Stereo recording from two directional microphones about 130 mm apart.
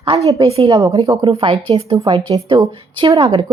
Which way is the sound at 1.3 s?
40° right (ahead or behind).